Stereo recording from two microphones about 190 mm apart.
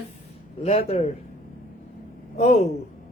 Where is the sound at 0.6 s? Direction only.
35° left (ahead or behind).